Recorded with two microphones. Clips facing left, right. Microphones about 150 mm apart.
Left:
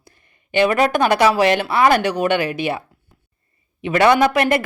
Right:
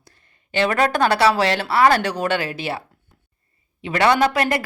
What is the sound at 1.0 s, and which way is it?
Speech, 15° left (ahead or behind).